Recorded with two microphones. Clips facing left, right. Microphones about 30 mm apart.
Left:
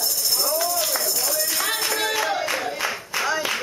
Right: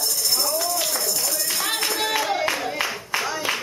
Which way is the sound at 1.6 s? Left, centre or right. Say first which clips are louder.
Right 1 dB; centre.